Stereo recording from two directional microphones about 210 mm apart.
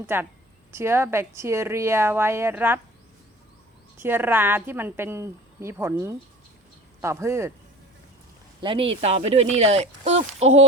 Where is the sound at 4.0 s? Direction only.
10° right (ahead or behind).